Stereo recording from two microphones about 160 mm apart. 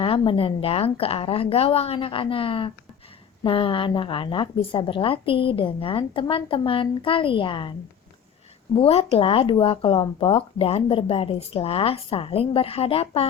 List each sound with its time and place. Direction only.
0.0 s speech: 35° left (ahead or behind)
8.7 s speech: 35° left (ahead or behind)